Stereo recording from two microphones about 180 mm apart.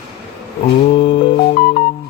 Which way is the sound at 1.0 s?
30° left (ahead or behind).